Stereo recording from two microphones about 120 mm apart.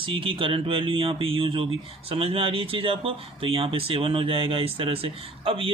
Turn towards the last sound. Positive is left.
turn(degrees=-50)  # may be behind; listen again after turning